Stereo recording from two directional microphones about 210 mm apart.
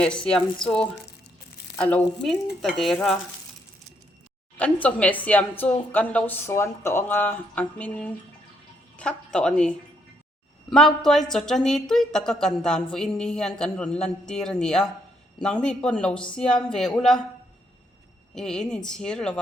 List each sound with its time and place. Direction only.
0.0 s a woman's voice: 5° left (ahead or behind)
4.5 s a woman's voice: 5° left (ahead or behind)
18.3 s a woman's voice: 5° left (ahead or behind)